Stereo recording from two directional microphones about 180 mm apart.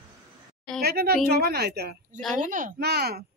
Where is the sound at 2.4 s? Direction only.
45° right (ahead or behind).